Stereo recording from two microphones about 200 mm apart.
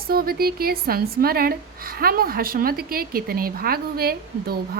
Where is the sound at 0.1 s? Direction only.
50° right (ahead or behind).